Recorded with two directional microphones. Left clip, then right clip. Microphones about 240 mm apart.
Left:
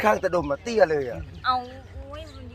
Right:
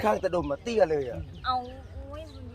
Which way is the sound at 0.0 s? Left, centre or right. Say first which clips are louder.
Left 4 dB; centre.